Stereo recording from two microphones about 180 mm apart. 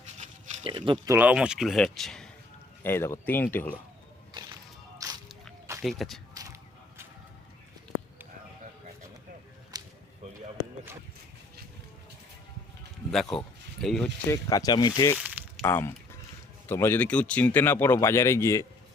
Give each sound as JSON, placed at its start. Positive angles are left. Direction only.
{"t": 0.6, "sound": "speech", "side_deg": -30}
{"t": 1.1, "sound": "speech", "side_deg": -10}
{"t": 2.8, "sound": "speech", "side_deg": 15}
{"t": 4.9, "sound": "music", "side_deg": -20}
{"t": 5.8, "sound": "speech", "side_deg": 0}
{"t": 6.3, "sound": "a sound", "side_deg": -20}
{"t": 9.7, "sound": "a sound", "side_deg": -20}
{"t": 13.8, "sound": "speech", "side_deg": 5}
{"t": 14.3, "sound": "speech", "side_deg": 20}
{"t": 15.2, "sound": "a sound", "side_deg": -5}
{"t": 15.6, "sound": "speech", "side_deg": 15}